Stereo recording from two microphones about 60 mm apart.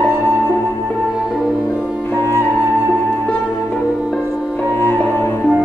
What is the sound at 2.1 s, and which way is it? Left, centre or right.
Music, left.